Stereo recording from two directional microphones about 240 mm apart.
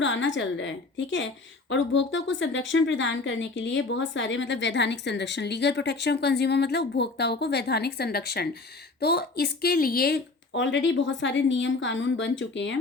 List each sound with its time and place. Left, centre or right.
0.0 s speech: left